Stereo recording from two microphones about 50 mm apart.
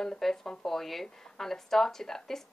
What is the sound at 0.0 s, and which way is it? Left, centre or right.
Speech, centre.